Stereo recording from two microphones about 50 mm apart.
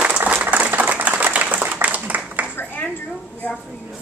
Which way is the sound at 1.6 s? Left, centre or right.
Right.